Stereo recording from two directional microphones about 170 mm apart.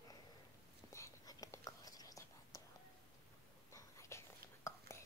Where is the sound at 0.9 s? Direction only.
15° left (ahead or behind).